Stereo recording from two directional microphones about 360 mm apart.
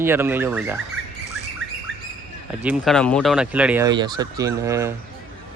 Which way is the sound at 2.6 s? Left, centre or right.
Centre.